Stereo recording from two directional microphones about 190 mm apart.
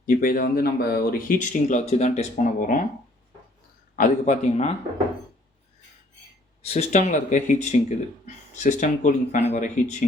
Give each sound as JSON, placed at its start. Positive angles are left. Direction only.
{"t": 0.0, "sound": "speech", "side_deg": 50}
{"t": 3.9, "sound": "speech", "side_deg": 40}
{"t": 6.6, "sound": "speech", "side_deg": 35}